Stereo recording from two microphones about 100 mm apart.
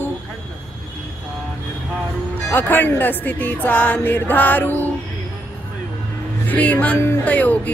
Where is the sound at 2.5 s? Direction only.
20° left (ahead or behind).